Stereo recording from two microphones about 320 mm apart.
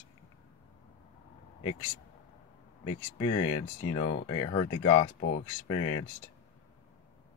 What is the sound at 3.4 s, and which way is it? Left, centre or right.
Speech, left.